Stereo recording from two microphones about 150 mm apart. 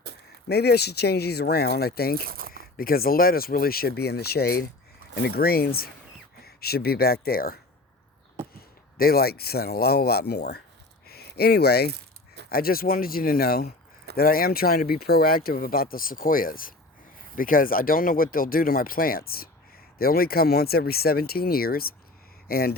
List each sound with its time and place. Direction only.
0.4 s speech: 90° left
2.2 s speech: 75° right (ahead or behind)
2.5 s speech: 80° left
9.0 s speech: 90° left
11.0 s a sound: 90° left
12.5 s speech: 80° left
14.2 s speech: 80° left